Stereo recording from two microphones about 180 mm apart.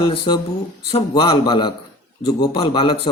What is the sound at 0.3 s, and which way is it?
Speech, 25° left (ahead or behind).